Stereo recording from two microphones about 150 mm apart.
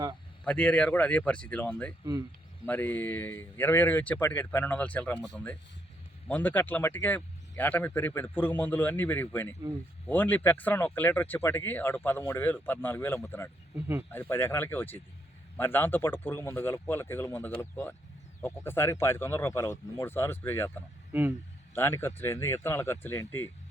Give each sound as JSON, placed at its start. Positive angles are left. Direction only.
{"t": 0.4, "sound": "speech", "side_deg": 5}
{"t": 13.7, "sound": "speech", "side_deg": -15}
{"t": 14.1, "sound": "speech", "side_deg": 15}
{"t": 21.1, "sound": "speech", "side_deg": -15}
{"t": 21.8, "sound": "speech", "side_deg": 15}